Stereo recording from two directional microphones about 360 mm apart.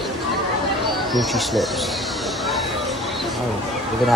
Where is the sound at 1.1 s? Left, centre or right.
Centre.